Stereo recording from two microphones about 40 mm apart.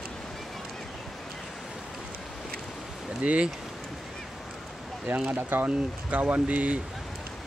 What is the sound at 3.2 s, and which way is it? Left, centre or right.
Speech, right.